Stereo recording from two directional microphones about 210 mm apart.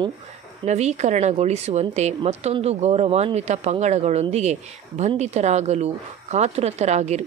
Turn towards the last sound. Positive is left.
turn(degrees=-30)  # may be behind; listen again after turning